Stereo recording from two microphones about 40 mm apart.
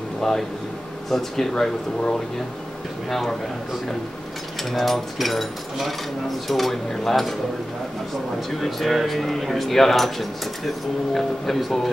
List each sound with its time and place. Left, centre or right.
0.2 s speech: centre
1.5 s speech: centre
3.1 s speech: centre
4.7 s speech: centre
8.5 s speech: centre